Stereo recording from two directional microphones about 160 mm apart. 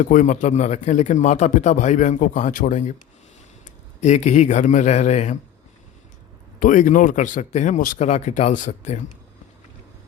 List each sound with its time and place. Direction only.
0.0 s a man's voice: 50° left (ahead or behind)
4.0 s a man's voice: 45° left (ahead or behind)
6.6 s a man's voice: 55° left (ahead or behind)